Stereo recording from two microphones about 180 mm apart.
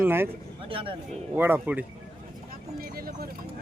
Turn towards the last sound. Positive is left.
turn(degrees=-55)  # may be behind; listen again after turning